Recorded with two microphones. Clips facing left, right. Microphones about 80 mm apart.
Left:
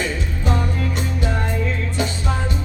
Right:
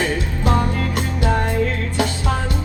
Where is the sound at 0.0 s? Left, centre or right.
Right.